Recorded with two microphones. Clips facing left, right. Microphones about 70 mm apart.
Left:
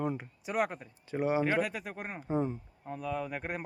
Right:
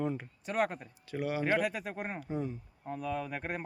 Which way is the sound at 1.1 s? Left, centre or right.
Left.